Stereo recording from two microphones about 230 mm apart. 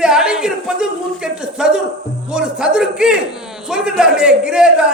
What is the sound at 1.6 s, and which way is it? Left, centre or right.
Music, centre.